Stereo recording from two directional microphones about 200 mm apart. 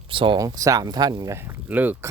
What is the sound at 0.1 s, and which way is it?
Speech, 25° right (ahead or behind).